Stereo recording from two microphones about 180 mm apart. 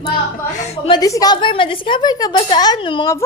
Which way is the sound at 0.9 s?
20° left (ahead or behind).